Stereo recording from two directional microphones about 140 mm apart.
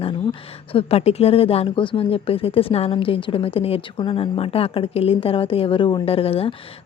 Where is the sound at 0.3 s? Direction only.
40° left (ahead or behind).